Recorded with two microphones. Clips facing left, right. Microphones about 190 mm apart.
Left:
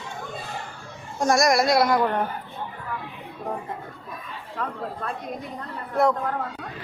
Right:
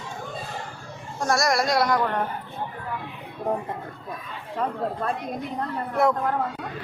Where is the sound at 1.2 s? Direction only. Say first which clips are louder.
Left 3 dB; 15° left (ahead or behind).